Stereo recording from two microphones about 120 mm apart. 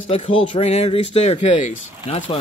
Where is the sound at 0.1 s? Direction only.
50° left (ahead or behind).